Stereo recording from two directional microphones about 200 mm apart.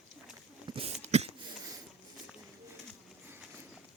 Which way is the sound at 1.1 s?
35° right (ahead or behind).